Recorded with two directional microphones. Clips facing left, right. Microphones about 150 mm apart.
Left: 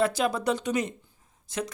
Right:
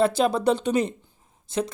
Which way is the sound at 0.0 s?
30° right (ahead or behind).